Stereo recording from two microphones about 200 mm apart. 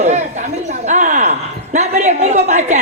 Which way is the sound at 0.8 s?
40° right (ahead or behind).